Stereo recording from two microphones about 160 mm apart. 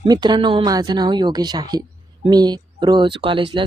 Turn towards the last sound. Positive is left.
turn(degrees=-30)  # may be behind; listen again after turning